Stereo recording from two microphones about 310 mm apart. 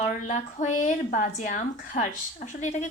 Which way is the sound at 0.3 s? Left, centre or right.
Left.